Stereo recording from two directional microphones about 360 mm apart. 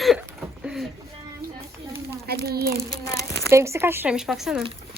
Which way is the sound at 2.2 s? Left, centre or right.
Right.